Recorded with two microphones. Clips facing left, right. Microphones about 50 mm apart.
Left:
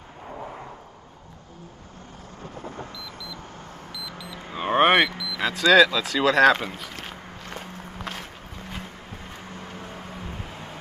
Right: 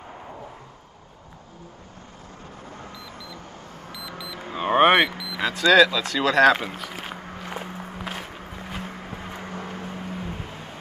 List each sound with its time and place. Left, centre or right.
4.5 s vehicle: centre
5.4 s run: centre